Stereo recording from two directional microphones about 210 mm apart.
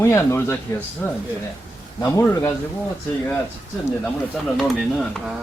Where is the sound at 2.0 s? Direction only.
15° left (ahead or behind).